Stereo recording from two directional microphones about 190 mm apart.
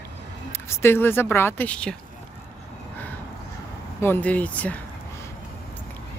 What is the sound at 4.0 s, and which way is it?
Speech, 10° left (ahead or behind).